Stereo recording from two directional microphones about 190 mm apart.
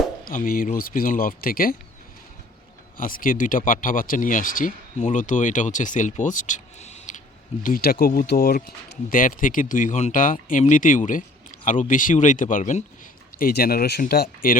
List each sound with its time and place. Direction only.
0.3 s speech: 50° left (ahead or behind)
3.0 s speech: 45° left (ahead or behind)
7.6 s speech: 50° left (ahead or behind)
13.4 s speech: 55° left (ahead or behind)